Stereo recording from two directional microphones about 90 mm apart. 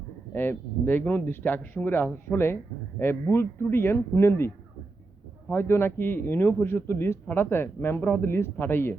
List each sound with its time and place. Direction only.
0.3 s a man's voice: 25° left (ahead or behind)